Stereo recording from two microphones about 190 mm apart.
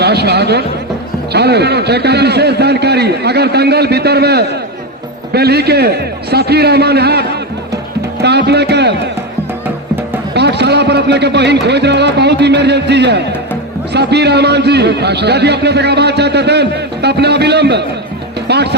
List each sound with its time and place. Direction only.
0.0 s a man's voice: 60° right (ahead or behind)
10.3 s a man's voice: 60° right (ahead or behind)